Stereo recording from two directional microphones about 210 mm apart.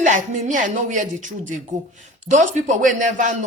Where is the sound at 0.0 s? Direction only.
35° right (ahead or behind).